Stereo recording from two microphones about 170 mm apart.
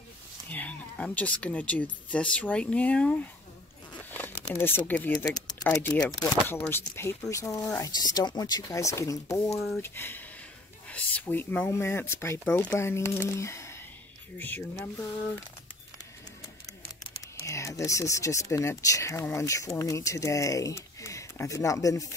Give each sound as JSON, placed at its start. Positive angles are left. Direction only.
{"t": 0.5, "sound": "speech", "side_deg": 10}
{"t": 4.1, "sound": "crumpling", "side_deg": 10}
{"t": 4.6, "sound": "speech", "side_deg": 15}
{"t": 17.5, "sound": "speech", "side_deg": 20}